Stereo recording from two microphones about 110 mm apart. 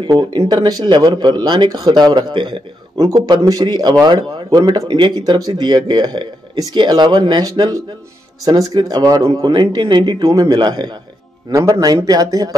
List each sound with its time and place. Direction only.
0.1 s speech: 45° right (ahead or behind)